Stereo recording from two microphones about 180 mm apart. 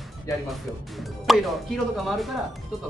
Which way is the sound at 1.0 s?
Centre (ahead or behind).